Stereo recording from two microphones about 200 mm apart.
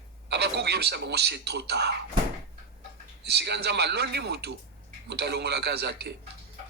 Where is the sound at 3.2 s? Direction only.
55° right (ahead or behind).